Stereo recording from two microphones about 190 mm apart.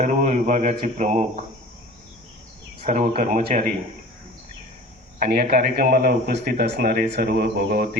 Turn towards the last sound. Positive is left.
turn(degrees=-50)  # may be behind; listen again after turning